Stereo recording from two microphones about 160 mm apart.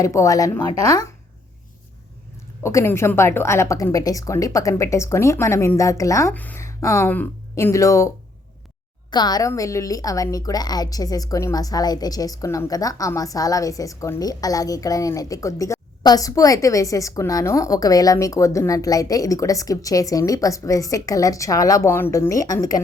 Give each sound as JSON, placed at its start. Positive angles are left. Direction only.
{"t": 0.0, "sound": "a woman's voice", "side_deg": 20}
{"t": 2.6, "sound": "a woman's voice", "side_deg": 15}